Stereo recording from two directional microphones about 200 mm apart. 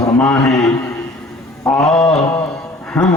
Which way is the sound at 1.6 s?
5° left (ahead or behind).